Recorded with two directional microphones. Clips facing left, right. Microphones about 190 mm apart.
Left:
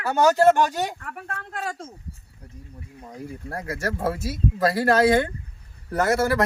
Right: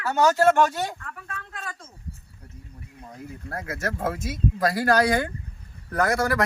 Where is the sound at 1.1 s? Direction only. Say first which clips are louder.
Left 4 dB; 60° left (ahead or behind).